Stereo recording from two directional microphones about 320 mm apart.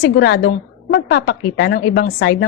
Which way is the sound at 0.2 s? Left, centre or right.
Left.